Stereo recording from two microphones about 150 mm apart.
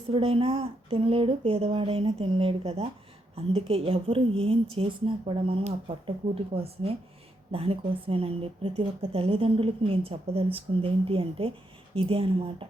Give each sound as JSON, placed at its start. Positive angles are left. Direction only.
{"t": 0.1, "sound": "a woman's voice", "side_deg": -40}